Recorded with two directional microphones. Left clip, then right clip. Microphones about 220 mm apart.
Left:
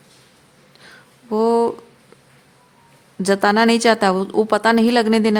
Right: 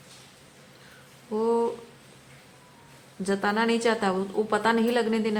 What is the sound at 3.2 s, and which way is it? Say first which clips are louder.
A woman's voice: left 10 dB; 55° left (ahead or behind).